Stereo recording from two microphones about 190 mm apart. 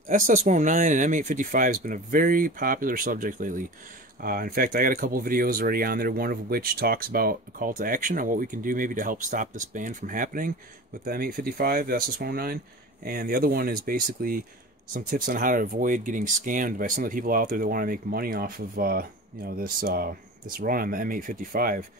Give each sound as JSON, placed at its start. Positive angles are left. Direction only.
{"t": 0.1, "sound": "speech", "side_deg": -40}